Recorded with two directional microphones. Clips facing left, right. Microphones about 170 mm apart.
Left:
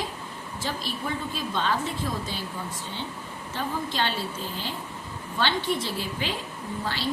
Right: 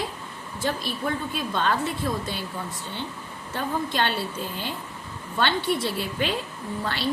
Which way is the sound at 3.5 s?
55° right (ahead or behind).